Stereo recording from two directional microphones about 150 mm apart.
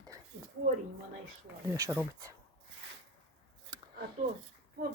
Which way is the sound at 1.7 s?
20° right (ahead or behind).